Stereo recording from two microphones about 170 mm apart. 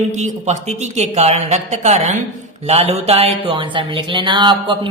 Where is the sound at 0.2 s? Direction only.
40° right (ahead or behind).